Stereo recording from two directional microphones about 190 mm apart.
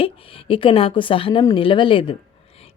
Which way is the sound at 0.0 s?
30° left (ahead or behind).